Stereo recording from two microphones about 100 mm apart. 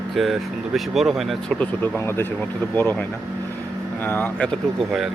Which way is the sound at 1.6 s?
20° left (ahead or behind).